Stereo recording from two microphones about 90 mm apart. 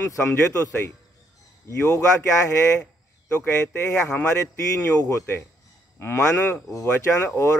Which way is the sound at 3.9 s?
30° left (ahead or behind).